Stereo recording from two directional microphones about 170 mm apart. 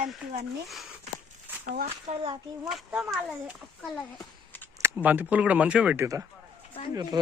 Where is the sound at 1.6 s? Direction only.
55° right (ahead or behind).